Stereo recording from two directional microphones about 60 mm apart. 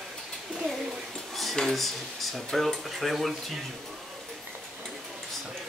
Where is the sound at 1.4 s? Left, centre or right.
Centre.